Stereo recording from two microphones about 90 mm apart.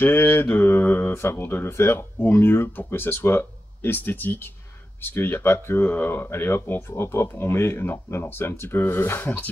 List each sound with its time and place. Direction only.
0.0 s speech: 25° left (ahead or behind)